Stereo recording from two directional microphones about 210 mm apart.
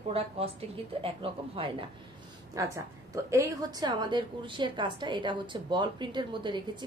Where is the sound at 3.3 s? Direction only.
15° right (ahead or behind).